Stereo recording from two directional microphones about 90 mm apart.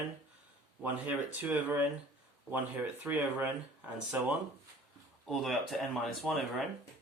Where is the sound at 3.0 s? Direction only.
20° right (ahead or behind).